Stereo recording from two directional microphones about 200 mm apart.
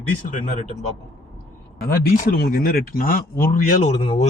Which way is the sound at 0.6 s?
35° left (ahead or behind).